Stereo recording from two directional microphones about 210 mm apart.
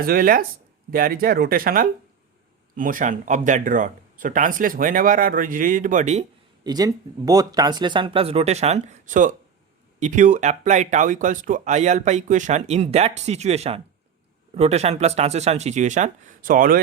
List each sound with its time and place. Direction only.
0.0 s speech: 45° right (ahead or behind)
6.7 s speech: 15° right (ahead or behind); by 16.8 s 40° right (ahead or behind)